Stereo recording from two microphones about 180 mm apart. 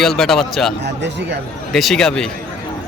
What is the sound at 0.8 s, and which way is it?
Speech, 75° right (ahead or behind).